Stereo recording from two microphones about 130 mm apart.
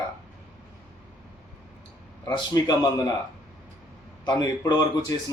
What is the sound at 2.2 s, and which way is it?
Speech, 30° left (ahead or behind).